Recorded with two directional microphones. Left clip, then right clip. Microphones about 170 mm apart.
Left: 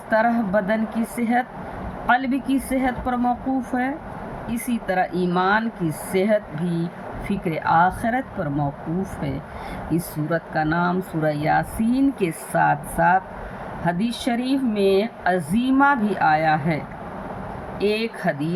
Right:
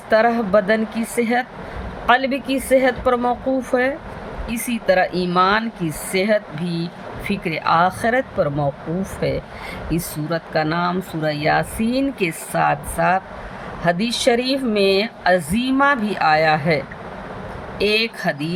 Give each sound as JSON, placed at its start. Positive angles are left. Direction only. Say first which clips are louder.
{"t": 0.1, "sound": "speech", "louder": "right 4 dB", "side_deg": -50}